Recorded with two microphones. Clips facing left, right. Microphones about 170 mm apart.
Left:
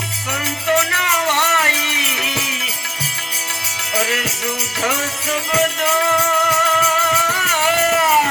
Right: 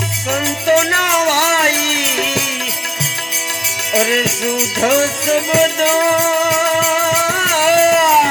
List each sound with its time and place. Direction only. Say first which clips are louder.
0.3 s music: right 6 dB; 60° right (ahead or behind)
3.9 s music: right 6 dB; 60° right (ahead or behind)